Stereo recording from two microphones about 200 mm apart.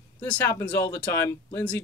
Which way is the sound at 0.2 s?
10° left (ahead or behind).